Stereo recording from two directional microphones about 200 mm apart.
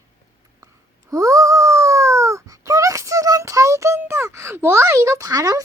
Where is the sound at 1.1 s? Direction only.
15° right (ahead or behind).